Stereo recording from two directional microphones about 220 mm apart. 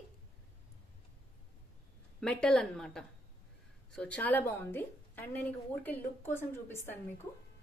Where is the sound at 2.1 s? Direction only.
5° left (ahead or behind).